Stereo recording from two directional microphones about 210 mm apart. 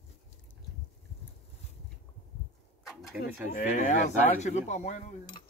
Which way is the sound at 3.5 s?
35° left (ahead or behind).